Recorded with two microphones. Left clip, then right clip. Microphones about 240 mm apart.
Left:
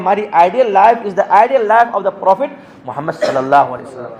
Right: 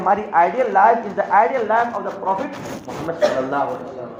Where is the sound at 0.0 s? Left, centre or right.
Left.